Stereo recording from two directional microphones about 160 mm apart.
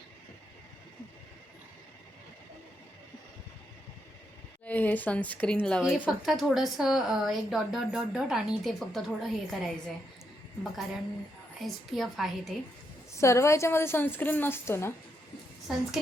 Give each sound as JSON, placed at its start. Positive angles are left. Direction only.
{"t": 4.6, "sound": "speech", "side_deg": 10}
{"t": 13.1, "sound": "a woman's voice", "side_deg": 20}
{"t": 15.7, "sound": "speech", "side_deg": 0}